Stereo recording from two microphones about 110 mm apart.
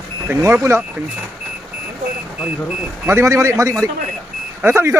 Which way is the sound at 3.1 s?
25° right (ahead or behind).